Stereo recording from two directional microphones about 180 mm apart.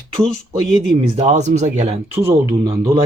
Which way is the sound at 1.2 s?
40° right (ahead or behind).